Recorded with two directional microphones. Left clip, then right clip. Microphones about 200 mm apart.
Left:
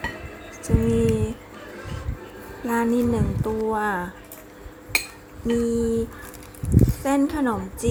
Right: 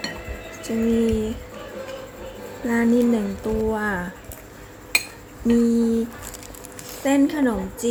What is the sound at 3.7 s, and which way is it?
Speech, 15° left (ahead or behind).